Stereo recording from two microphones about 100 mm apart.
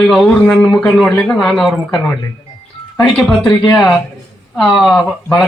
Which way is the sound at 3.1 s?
10° left (ahead or behind).